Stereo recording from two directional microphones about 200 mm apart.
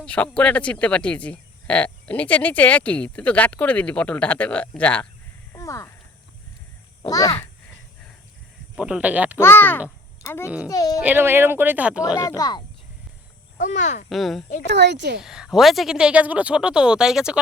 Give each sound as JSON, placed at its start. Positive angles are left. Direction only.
{"t": 0.0, "sound": "speech", "side_deg": 5}
{"t": 7.0, "sound": "a child's voice", "side_deg": 20}
{"t": 8.7, "sound": "speech", "side_deg": -5}
{"t": 9.4, "sound": "speech", "side_deg": 10}
{"t": 11.0, "sound": "speech", "side_deg": -10}
{"t": 12.2, "sound": "speech", "side_deg": 15}
{"t": 13.6, "sound": "speech", "side_deg": 40}
{"t": 14.1, "sound": "speech", "side_deg": 0}
{"t": 14.7, "sound": "speech", "side_deg": -60}
{"t": 15.2, "sound": "speech", "side_deg": -5}